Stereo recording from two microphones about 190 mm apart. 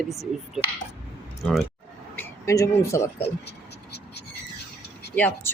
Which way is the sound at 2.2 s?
15° left (ahead or behind).